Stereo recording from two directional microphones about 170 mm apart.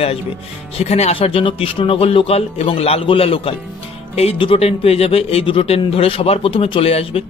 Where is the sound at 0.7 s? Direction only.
40° left (ahead or behind).